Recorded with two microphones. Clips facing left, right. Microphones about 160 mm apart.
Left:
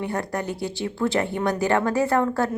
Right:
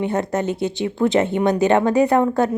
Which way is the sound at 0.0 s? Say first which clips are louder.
Right 6 dB; 20° right (ahead or behind).